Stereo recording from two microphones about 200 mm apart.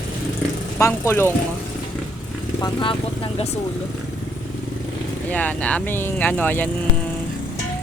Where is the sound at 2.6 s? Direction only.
20° left (ahead or behind).